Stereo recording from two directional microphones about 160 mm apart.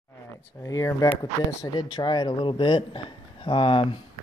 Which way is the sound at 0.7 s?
20° left (ahead or behind).